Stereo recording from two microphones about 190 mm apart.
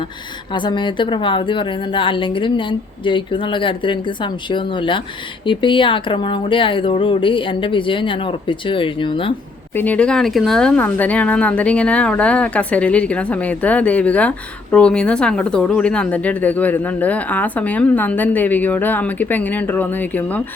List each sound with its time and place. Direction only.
0.5 s speech: 25° left (ahead or behind)
9.7 s speech: 10° left (ahead or behind)